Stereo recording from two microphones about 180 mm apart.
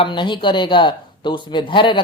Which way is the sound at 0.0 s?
25° left (ahead or behind).